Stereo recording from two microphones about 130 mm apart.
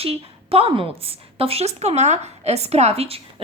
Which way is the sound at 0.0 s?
50° right (ahead or behind).